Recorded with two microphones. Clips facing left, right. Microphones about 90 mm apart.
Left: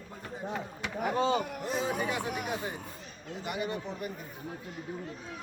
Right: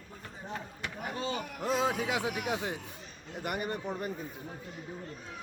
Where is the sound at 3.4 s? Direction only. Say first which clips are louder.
Even; 50° right (ahead or behind).